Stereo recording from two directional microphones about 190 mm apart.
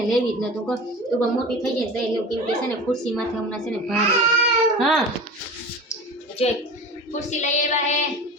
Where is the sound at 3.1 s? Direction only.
5° left (ahead or behind).